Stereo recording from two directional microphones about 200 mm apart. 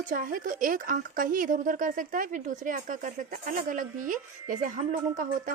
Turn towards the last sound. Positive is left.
turn(degrees=-40)  # may be behind; listen again after turning